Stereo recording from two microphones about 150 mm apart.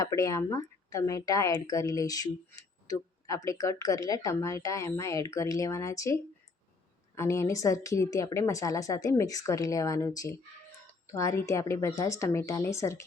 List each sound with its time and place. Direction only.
0.0 s speech: 20° left (ahead or behind)
7.2 s speech: 20° left (ahead or behind)